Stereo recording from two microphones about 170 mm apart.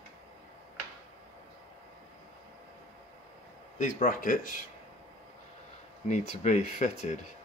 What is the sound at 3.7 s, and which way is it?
Speech, 50° left (ahead or behind).